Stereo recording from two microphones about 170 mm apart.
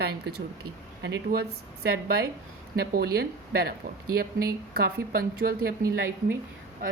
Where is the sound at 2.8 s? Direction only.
65° right (ahead or behind).